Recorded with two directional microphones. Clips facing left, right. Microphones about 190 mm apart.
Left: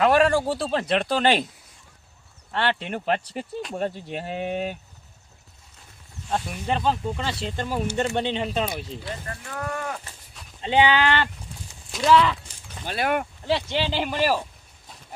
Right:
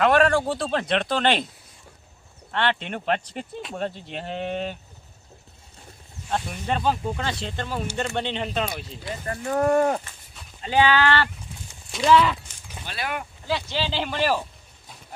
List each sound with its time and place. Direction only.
0.0 s speech: 5° left (ahead or behind)
2.5 s speech: 5° left (ahead or behind)
6.3 s speech: centre (ahead or behind)
9.2 s speech: 35° right (ahead or behind)
10.6 s speech: 20° left (ahead or behind)
11.9 s speech: centre (ahead or behind)
12.8 s speech: 50° left (ahead or behind)
13.5 s speech: 20° left (ahead or behind)